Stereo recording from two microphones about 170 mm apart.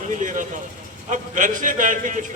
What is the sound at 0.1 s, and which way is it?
Vehicle, 50° right (ahead or behind).